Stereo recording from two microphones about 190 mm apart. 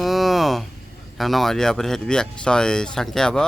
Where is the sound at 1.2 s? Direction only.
Centre (ahead or behind).